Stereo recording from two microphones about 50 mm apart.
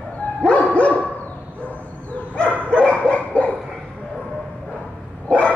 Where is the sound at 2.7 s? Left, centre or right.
Left.